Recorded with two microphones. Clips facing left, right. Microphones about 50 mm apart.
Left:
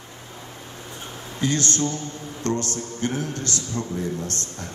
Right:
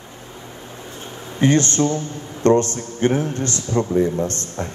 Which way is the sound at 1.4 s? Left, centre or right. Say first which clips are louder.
Right 7 dB; right.